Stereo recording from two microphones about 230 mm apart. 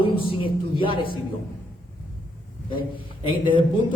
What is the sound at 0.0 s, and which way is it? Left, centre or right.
Speech, left.